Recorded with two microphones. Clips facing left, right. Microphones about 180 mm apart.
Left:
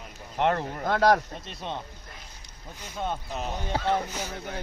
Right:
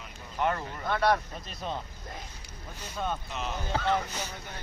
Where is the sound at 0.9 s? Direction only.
90° left.